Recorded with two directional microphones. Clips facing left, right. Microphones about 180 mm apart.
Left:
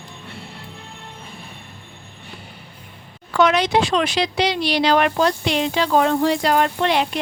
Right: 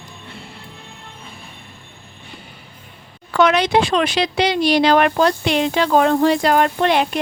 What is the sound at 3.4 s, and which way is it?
Speech, 60° right (ahead or behind).